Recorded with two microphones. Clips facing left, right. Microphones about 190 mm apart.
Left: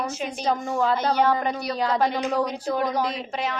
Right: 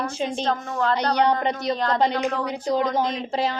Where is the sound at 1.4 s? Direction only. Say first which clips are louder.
Right 3 dB; 20° right (ahead or behind).